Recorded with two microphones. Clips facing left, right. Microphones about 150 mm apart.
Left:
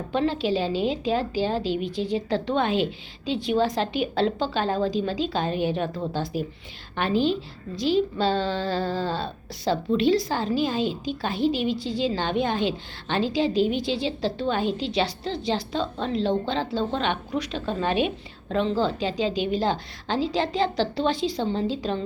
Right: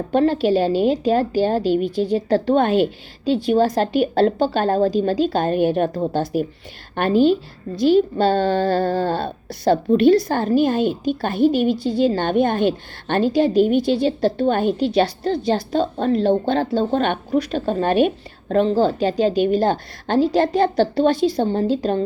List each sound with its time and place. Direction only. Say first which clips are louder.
0.1 s speech: right 7 dB; 50° right (ahead or behind)